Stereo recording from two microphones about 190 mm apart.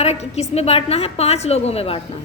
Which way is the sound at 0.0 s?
35° left (ahead or behind).